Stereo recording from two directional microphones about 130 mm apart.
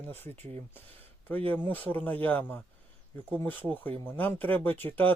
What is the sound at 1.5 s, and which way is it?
Speech, 15° left (ahead or behind).